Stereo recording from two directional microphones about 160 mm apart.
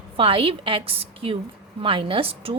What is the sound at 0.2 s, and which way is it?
A woman's voice, 35° right (ahead or behind).